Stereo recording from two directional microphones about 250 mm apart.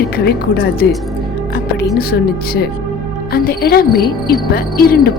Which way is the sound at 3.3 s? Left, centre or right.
Left.